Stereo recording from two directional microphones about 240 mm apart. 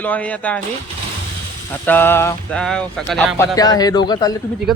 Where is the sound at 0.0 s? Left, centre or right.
Centre.